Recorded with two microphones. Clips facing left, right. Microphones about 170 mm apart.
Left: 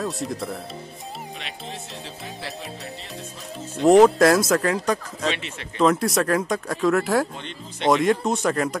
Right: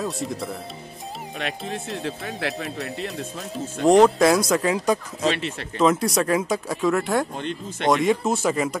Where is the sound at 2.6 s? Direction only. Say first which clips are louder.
Right 6 dB; centre (ahead or behind).